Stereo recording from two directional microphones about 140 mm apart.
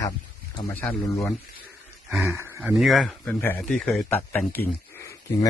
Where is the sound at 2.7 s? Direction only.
Centre (ahead or behind).